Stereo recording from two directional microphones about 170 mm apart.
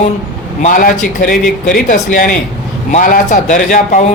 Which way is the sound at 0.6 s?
55° left (ahead or behind).